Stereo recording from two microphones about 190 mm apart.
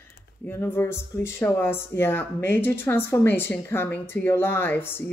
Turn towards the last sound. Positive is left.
turn(degrees=10)  # may be behind; listen again after turning